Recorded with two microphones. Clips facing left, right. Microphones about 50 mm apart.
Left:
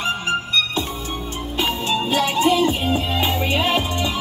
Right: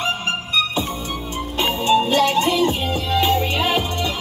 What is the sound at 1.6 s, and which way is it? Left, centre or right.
Music, centre.